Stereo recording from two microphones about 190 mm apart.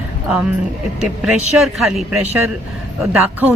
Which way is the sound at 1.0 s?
5° right (ahead or behind).